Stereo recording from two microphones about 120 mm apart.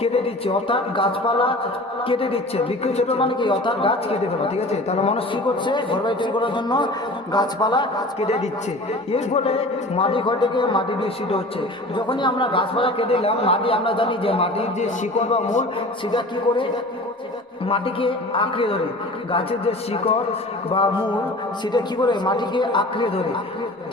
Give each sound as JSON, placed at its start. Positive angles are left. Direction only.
{"t": 0.0, "sound": "speech", "side_deg": 55}
{"t": 5.3, "sound": "a man's voice", "side_deg": 40}
{"t": 9.1, "sound": "speech", "side_deg": 55}
{"t": 14.8, "sound": "a man's voice", "side_deg": 80}
{"t": 17.7, "sound": "a man's voice", "side_deg": 50}